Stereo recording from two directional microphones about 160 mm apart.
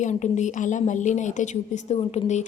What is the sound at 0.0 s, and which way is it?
A woman's voice, 50° left (ahead or behind).